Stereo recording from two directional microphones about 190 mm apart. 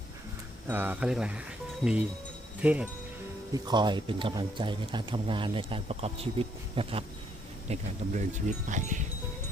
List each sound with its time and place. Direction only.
0.7 s speech: 10° right (ahead or behind)
3.5 s speech: 20° right (ahead or behind)
7.7 s speech: 40° right (ahead or behind)